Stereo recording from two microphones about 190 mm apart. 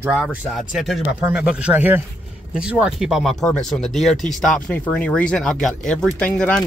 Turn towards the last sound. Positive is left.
turn(degrees=5)  # may be behind; listen again after turning